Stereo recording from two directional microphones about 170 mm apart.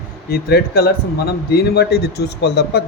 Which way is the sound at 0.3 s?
65° left (ahead or behind).